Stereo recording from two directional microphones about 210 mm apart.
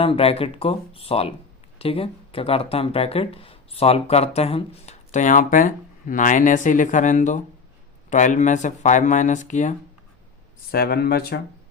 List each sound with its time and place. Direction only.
0.0 s speech: 25° left (ahead or behind)
10.7 s speech: 45° left (ahead or behind)